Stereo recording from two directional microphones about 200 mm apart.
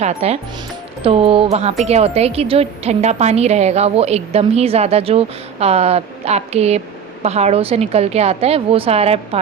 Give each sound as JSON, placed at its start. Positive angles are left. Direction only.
{"t": 0.0, "sound": "a woman's voice", "side_deg": -35}